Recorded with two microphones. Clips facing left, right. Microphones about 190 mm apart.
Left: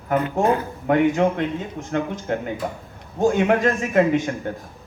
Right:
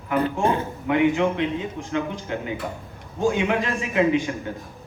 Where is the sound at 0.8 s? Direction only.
45° left (ahead or behind).